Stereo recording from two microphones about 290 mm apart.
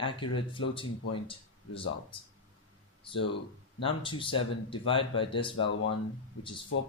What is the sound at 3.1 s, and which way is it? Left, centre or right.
Speech, centre.